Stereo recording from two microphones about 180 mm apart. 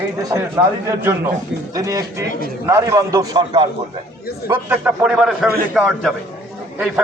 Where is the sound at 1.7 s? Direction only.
20° right (ahead or behind).